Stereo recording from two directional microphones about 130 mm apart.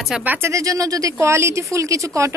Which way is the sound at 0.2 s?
15° right (ahead or behind).